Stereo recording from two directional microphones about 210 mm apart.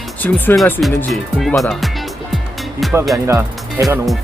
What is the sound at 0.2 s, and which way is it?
Speech, 10° left (ahead or behind).